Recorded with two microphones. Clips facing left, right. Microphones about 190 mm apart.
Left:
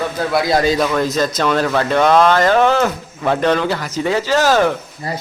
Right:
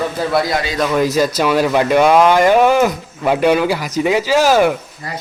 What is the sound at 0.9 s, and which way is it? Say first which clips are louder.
Speech: right 3 dB; 10° right (ahead or behind).